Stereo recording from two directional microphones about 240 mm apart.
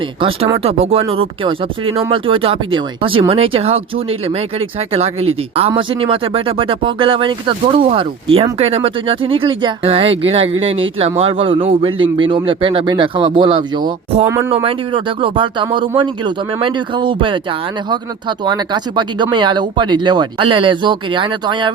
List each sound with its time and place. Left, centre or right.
0.2 s speech: right